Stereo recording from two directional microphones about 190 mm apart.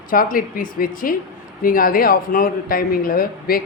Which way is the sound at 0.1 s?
45° left (ahead or behind).